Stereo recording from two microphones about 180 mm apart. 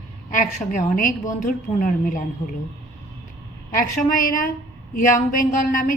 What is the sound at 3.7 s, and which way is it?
A woman's voice, 50° left (ahead or behind).